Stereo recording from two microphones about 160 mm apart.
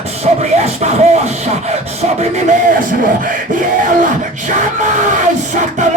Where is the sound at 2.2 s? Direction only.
55° right (ahead or behind).